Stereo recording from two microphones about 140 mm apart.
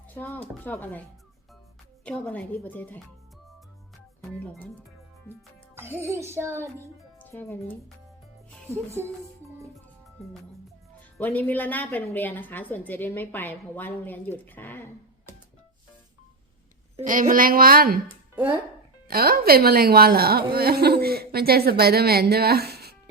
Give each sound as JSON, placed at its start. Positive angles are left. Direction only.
{"t": 0.1, "sound": "a woman's voice", "side_deg": 15}
{"t": 2.0, "sound": "a woman's voice", "side_deg": 10}
{"t": 4.2, "sound": "speech", "side_deg": 0}
{"t": 5.7, "sound": "music", "side_deg": -15}
{"t": 7.2, "sound": "music", "side_deg": 15}
{"t": 8.7, "sound": "speech", "side_deg": -20}
{"t": 11.2, "sound": "a woman's voice", "side_deg": 15}
{"t": 17.0, "sound": "a woman's voice", "side_deg": -75}
{"t": 19.0, "sound": "a woman's voice", "side_deg": -90}